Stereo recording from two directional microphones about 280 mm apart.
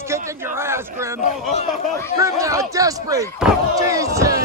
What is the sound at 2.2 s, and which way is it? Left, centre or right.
A man's voice, centre.